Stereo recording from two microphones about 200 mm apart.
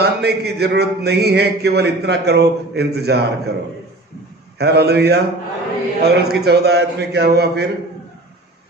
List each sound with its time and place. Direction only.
0.0 s a man's voice: 55° right (ahead or behind)
4.5 s a man's voice: 55° right (ahead or behind)